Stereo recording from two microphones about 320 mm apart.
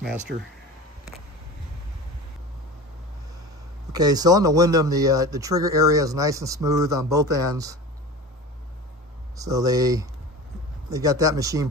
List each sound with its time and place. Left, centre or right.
0.0 s speech: centre
3.9 s a man's voice: centre
9.4 s a man's voice: centre